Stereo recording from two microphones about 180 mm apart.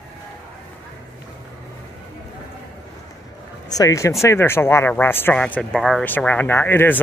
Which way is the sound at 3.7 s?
20° left (ahead or behind).